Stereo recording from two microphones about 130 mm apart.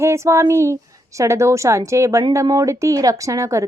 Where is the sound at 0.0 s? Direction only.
20° right (ahead or behind).